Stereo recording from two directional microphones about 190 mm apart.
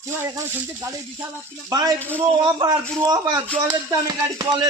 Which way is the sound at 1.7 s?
20° right (ahead or behind).